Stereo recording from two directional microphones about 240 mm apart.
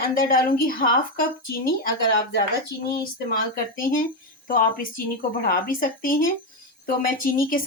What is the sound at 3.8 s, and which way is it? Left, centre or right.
A woman's voice, left.